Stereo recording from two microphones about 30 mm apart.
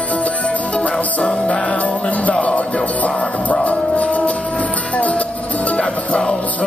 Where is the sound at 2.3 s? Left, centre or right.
Left.